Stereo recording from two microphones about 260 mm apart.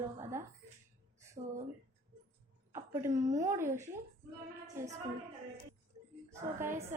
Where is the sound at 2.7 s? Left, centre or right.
Centre.